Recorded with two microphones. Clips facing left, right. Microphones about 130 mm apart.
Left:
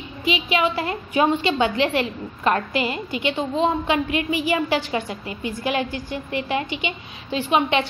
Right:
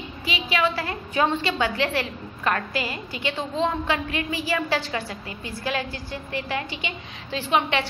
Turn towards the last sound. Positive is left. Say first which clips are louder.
# left 3 dB
turn(degrees=20)  # may be behind; listen again after turning